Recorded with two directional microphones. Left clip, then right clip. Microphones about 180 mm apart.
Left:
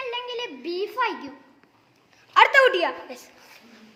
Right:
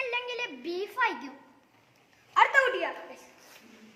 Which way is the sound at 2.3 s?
60° left (ahead or behind).